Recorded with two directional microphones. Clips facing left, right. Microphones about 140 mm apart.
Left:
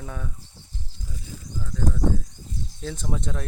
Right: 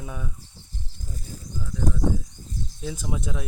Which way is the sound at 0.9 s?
45° right (ahead or behind).